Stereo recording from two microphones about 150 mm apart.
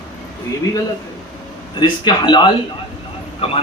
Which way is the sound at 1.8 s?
30° left (ahead or behind).